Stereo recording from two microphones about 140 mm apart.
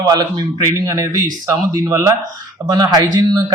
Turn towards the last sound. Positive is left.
turn(degrees=-25)  # may be behind; listen again after turning